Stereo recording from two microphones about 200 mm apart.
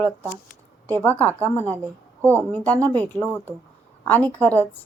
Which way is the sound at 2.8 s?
10° left (ahead or behind).